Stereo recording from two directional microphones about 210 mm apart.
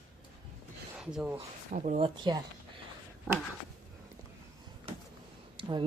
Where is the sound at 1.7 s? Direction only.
35° right (ahead or behind).